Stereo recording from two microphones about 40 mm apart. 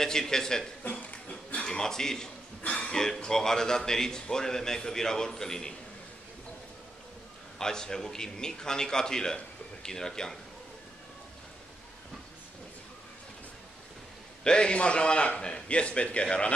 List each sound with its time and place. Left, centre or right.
0.0 s a man's voice: centre
0.8 s burping: left
1.6 s a man's voice: centre
2.7 s a sound: left
3.0 s a man's voice: centre
7.5 s a man's voice: centre
14.4 s a man's voice: left